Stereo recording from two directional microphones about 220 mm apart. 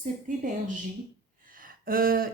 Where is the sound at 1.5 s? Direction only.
40° right (ahead or behind).